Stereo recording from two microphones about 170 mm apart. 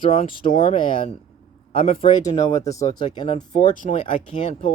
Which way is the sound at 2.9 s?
25° left (ahead or behind).